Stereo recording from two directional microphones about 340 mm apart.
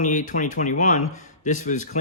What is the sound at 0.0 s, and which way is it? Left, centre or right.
Speech, left.